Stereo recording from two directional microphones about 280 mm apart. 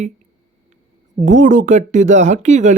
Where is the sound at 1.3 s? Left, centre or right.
Right.